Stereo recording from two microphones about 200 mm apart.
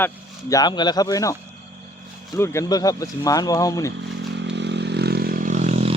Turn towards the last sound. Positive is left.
turn(degrees=-35)  # may be behind; listen again after turning